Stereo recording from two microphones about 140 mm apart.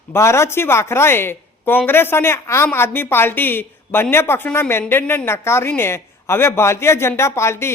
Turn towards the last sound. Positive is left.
turn(degrees=20)  # may be behind; listen again after turning